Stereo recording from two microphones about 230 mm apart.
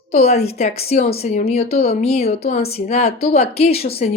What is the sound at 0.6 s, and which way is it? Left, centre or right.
Speech, left.